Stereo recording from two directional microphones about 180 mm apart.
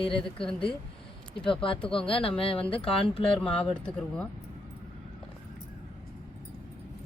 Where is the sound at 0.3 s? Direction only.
30° left (ahead or behind).